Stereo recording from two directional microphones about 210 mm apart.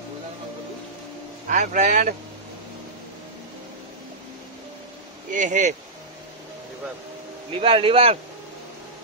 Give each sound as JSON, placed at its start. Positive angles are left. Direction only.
{"t": 1.5, "sound": "speech", "side_deg": -35}
{"t": 5.3, "sound": "speech", "side_deg": -35}
{"t": 7.5, "sound": "speech", "side_deg": -25}